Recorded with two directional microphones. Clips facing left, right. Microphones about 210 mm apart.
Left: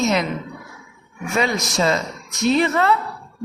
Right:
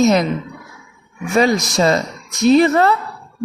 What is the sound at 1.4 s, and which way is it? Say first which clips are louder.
A woman's voice: right 6 dB; 40° right (ahead or behind).